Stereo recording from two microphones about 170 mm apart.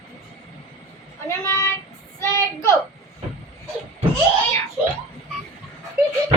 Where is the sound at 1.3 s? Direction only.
15° left (ahead or behind).